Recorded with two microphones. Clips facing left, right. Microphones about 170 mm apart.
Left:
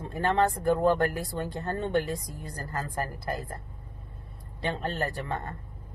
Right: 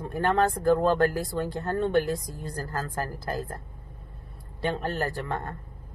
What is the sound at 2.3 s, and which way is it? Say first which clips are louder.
Speech: right 4 dB; 20° left (ahead or behind).